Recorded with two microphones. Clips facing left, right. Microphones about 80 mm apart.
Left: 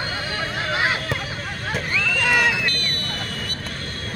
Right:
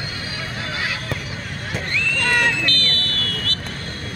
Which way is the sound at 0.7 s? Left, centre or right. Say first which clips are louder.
Left 5 dB; left.